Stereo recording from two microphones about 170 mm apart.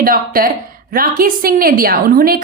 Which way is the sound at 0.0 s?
55° right (ahead or behind).